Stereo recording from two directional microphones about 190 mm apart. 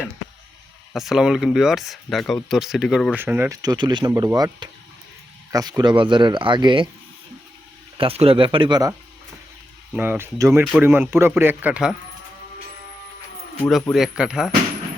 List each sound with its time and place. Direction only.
0.9 s speech: centre (ahead or behind); by 6.8 s 25° right (ahead or behind)
7.9 s speech: 30° right (ahead or behind)
9.9 s a man's voice: 10° right (ahead or behind)
13.6 s speech: 5° left (ahead or behind)